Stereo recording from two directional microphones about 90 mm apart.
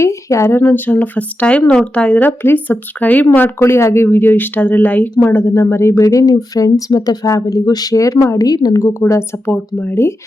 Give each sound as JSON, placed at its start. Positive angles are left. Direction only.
{"t": 0.0, "sound": "speech", "side_deg": 35}
{"t": 0.6, "sound": "speech", "side_deg": 20}